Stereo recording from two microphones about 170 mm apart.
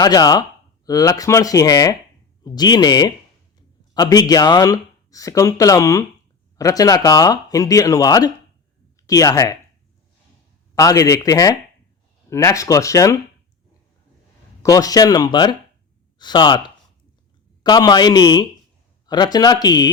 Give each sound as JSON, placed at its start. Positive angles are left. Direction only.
{"t": 0.0, "sound": "speech", "side_deg": 25}
{"t": 10.8, "sound": "speech", "side_deg": 20}
{"t": 14.6, "sound": "speech", "side_deg": 20}